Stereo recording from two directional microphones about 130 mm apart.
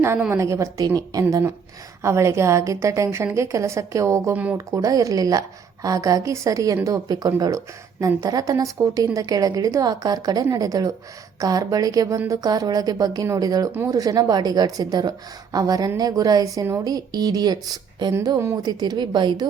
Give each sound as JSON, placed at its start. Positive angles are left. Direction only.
{"t": 0.2, "sound": "a woman's voice", "side_deg": -20}